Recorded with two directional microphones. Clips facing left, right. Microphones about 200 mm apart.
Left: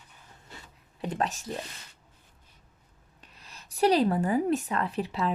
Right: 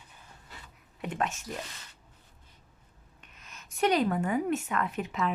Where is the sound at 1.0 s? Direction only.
35° left (ahead or behind).